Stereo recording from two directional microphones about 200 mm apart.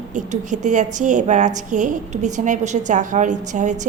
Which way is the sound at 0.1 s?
40° right (ahead or behind).